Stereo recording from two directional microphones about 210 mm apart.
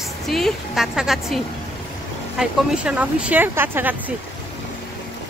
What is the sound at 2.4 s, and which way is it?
Speech, 5° right (ahead or behind).